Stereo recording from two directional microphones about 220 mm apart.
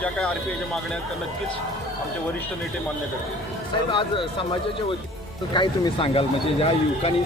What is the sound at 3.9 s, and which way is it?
Speech, 25° left (ahead or behind).